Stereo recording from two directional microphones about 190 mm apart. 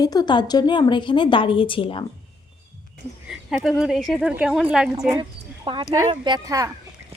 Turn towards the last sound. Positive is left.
turn(degrees=-20)  # may be behind; listen again after turning